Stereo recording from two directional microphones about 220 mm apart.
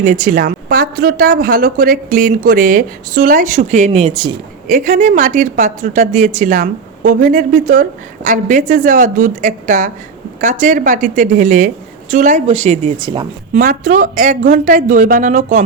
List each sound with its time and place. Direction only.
0.0 s a woman's voice: 35° right (ahead or behind)
4.7 s a woman's voice: 35° right (ahead or behind)